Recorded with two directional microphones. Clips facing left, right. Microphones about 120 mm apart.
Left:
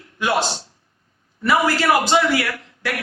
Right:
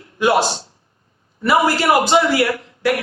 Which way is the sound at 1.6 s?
20° right (ahead or behind).